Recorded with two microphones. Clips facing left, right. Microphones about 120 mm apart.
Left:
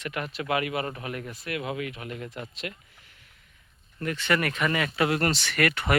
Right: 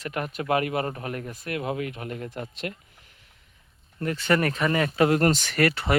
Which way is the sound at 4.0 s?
35° right (ahead or behind).